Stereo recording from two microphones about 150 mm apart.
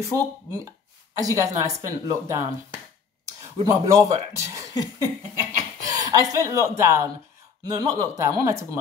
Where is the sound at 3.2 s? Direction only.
20° right (ahead or behind).